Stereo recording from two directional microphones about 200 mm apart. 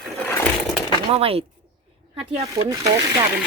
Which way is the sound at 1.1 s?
30° right (ahead or behind).